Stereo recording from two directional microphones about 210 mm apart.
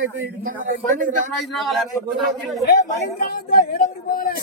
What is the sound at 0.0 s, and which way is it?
Speech, 70° right (ahead or behind).